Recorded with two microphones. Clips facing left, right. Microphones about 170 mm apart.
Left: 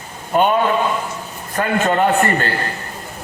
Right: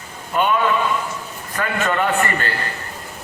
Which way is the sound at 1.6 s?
40° left (ahead or behind).